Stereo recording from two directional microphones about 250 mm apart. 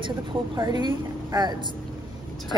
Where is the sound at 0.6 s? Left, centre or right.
Centre.